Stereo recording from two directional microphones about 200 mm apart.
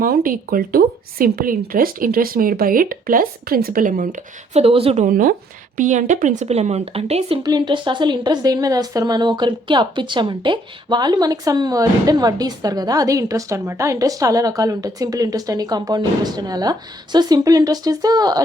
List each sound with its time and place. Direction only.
0.0 s a woman's voice: 45° right (ahead or behind)
4.6 s a woman's voice: 30° right (ahead or behind)
5.0 s a woman's voice: 40° right (ahead or behind); by 18.4 s 20° right (ahead or behind)